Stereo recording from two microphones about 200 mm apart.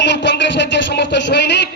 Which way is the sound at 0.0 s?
60° left (ahead or behind).